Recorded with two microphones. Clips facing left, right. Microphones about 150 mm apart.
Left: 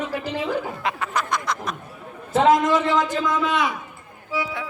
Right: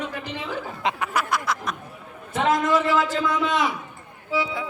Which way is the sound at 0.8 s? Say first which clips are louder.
Right 1 dB; 20° right (ahead or behind).